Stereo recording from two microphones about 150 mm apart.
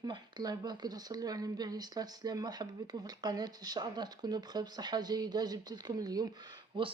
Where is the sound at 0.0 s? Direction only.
30° right (ahead or behind).